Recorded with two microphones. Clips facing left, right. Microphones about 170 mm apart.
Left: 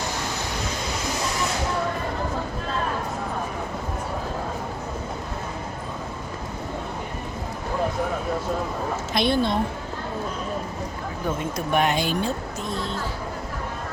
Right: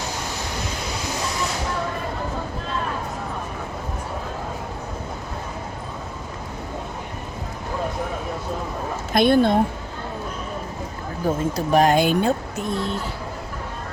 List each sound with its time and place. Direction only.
9.1 s a woman's voice: 50° right (ahead or behind)
11.3 s speech: 35° right (ahead or behind)
11.9 s a woman's voice: 55° right (ahead or behind)